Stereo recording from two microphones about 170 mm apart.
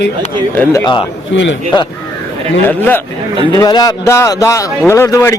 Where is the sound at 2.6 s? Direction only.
10° left (ahead or behind).